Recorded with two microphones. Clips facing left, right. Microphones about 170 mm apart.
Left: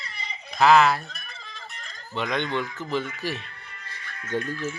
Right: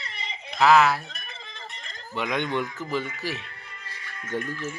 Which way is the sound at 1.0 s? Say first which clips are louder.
Even; 20° right (ahead or behind).